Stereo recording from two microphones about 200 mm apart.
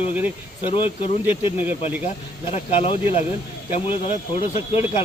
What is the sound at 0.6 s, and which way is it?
Speech, 25° left (ahead or behind).